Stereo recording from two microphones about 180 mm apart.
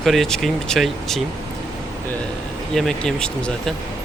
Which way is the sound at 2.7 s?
5° left (ahead or behind).